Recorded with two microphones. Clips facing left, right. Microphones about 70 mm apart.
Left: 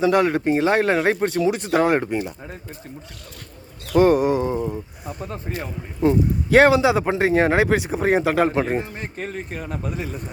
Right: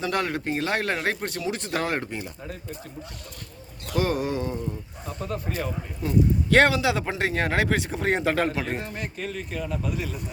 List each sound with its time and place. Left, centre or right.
0.0 s speech: centre
4.0 s speech: left; by 8.5 s centre
8.5 s speech: left
9.1 s speech: left